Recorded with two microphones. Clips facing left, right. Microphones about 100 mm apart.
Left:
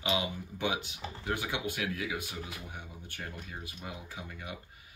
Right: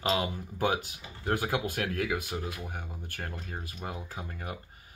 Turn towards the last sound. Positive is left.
turn(degrees=-45)  # may be behind; listen again after turning